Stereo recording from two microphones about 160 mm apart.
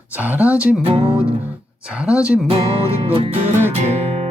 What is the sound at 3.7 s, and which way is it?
Music, 45° right (ahead or behind).